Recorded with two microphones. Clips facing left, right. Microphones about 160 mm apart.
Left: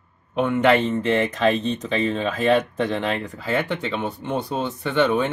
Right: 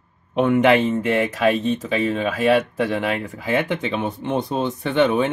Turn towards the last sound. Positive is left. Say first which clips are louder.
# right 2 dB
turn(degrees=-20)  # may be behind; listen again after turning